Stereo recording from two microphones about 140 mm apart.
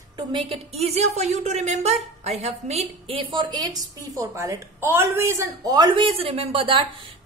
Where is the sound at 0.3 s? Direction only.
40° right (ahead or behind).